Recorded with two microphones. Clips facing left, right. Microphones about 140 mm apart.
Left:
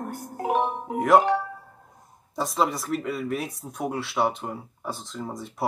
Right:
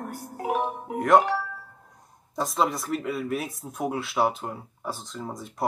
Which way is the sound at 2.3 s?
Centre (ahead or behind).